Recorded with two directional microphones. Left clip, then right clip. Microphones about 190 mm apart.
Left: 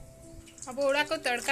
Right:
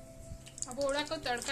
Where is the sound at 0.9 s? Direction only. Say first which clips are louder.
Left 7 dB; 15° left (ahead or behind).